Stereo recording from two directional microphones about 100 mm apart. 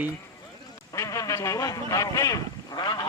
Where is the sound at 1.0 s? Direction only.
30° left (ahead or behind).